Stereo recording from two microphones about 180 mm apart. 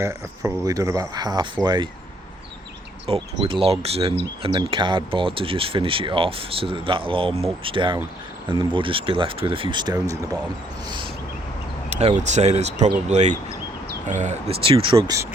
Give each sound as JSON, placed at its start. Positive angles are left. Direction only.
{"t": 0.0, "sound": "speech", "side_deg": -15}
{"t": 3.1, "sound": "speech", "side_deg": -30}
{"t": 11.9, "sound": "speech", "side_deg": -40}